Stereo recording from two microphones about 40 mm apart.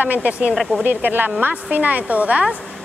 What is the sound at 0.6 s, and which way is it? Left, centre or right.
Speech, centre.